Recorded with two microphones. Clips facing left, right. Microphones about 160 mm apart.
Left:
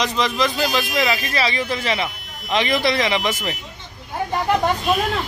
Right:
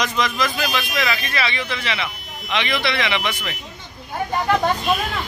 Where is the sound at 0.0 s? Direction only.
30° left (ahead or behind).